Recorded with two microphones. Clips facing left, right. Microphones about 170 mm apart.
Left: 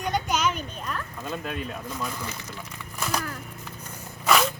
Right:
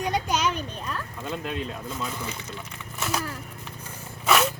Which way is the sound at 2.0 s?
5° right (ahead or behind).